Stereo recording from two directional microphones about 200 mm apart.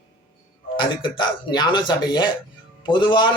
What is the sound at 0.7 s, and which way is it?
A man's voice, 25° left (ahead or behind).